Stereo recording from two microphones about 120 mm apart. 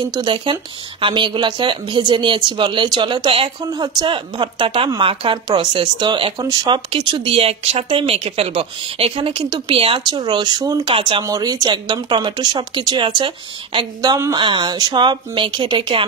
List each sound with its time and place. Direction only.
0.0 s speech: 40° right (ahead or behind)
6.4 s speech: 30° right (ahead or behind)
6.9 s speech: 45° right (ahead or behind)
11.0 s speech: 45° right (ahead or behind)
11.2 s speech: 30° right (ahead or behind)